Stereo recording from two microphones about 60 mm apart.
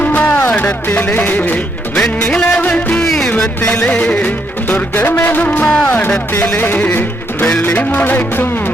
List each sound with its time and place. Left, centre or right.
0.0 s music: left
2.0 s music: centre
2.6 s speech: left
2.9 s music: centre
3.6 s speech: centre
5.6 s speech: centre